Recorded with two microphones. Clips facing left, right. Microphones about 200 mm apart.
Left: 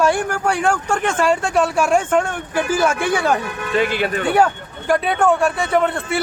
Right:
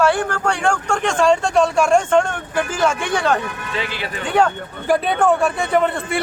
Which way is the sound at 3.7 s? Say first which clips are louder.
Left 10 dB; 50° left (ahead or behind).